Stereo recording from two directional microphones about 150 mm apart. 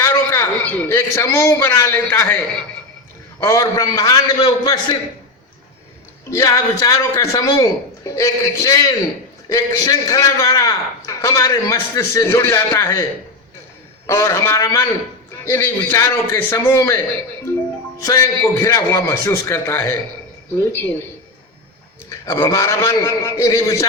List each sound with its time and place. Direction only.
0.0 s a man's voice: 15° left (ahead or behind)
3.4 s a man's voice: 20° left (ahead or behind)
6.3 s a man's voice: 20° left (ahead or behind)
14.1 s a man's voice: 15° left (ahead or behind)
18.0 s a man's voice: 20° left (ahead or behind)
22.1 s a man's voice: 20° left (ahead or behind)